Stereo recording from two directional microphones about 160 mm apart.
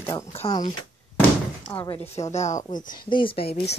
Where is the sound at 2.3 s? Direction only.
50° left (ahead or behind).